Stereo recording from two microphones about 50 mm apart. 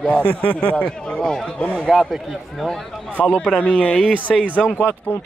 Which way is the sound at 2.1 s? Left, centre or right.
Centre.